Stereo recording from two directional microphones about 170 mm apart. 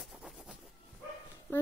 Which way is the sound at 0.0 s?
Centre (ahead or behind).